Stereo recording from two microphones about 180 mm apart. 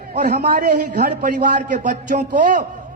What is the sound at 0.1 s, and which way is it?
A man's voice, 45° right (ahead or behind).